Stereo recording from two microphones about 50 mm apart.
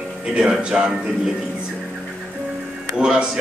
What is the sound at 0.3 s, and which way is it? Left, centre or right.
Speech, centre.